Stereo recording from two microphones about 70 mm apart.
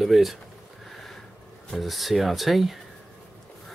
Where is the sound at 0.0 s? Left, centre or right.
Centre.